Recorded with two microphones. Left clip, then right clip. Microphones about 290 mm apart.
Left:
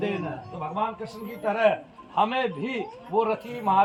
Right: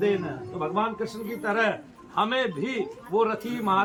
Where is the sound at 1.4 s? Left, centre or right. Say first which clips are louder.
Left 3 dB; right.